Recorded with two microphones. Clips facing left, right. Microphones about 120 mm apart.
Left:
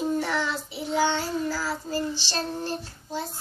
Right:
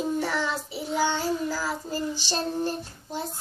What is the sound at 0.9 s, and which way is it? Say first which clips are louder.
Child singing: left 1 dB; 5° right (ahead or behind).